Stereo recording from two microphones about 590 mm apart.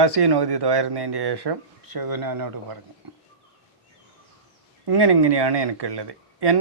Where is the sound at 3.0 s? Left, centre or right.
Right.